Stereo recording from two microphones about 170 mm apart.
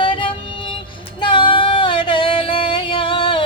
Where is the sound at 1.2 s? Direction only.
30° left (ahead or behind).